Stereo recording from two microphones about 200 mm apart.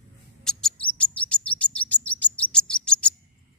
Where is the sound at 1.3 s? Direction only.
5° left (ahead or behind).